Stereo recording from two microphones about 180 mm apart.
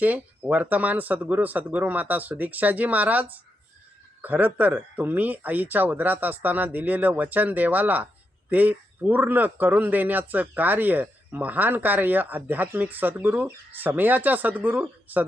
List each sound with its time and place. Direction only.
0.0 s speech: 10° right (ahead or behind)